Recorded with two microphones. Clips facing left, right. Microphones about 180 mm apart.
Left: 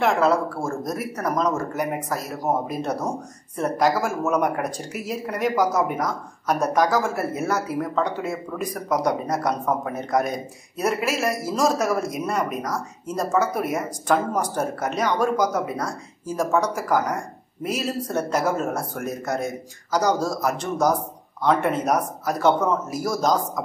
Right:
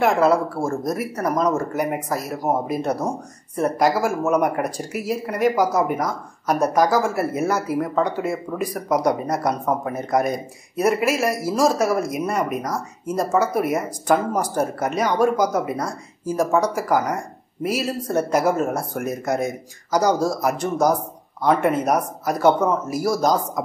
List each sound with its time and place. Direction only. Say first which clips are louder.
0.0 s speech: right 2 dB; 5° right (ahead or behind)